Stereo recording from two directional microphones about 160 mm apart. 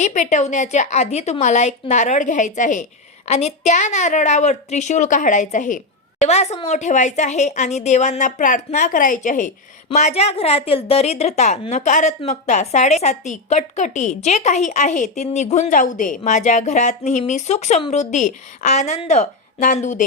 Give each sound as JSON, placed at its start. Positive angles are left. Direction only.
{"t": 0.0, "sound": "a woman's voice", "side_deg": 50}